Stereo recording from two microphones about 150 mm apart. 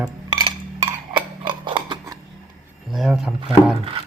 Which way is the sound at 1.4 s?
35° right (ahead or behind).